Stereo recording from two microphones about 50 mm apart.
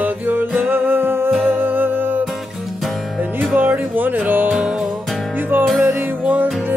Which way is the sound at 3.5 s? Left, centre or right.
Right.